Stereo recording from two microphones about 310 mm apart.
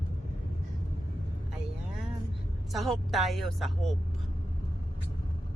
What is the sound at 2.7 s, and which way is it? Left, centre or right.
A woman's voice, centre.